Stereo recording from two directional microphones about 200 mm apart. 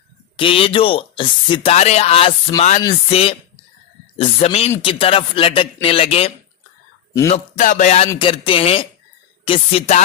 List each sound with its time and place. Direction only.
0.4 s speech: 25° left (ahead or behind)
7.2 s a sound: 35° left (ahead or behind)
8.1 s speech: 25° left (ahead or behind)